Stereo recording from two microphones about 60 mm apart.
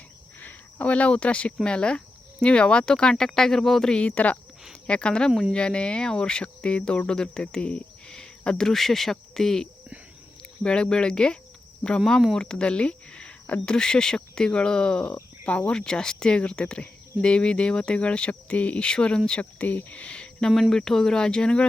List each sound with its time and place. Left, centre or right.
0.3 s speech: left